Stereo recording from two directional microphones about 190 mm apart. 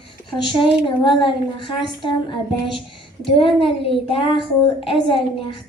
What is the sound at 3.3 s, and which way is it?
A woman's voice, 30° left (ahead or behind).